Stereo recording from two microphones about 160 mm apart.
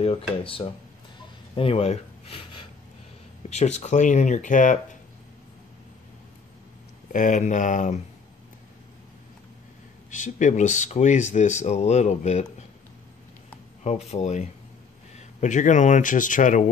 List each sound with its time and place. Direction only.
0.0 s speech: 35° left (ahead or behind); by 4.7 s 55° left (ahead or behind)
7.1 s speech: 55° left (ahead or behind)
10.1 s speech: 50° left (ahead or behind)
13.8 s speech: 45° left (ahead or behind)